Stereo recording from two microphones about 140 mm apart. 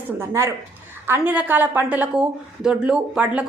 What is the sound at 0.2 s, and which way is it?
A woman's voice, 20° right (ahead or behind).